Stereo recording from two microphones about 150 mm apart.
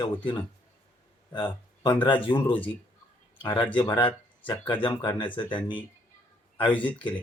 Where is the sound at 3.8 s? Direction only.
30° left (ahead or behind).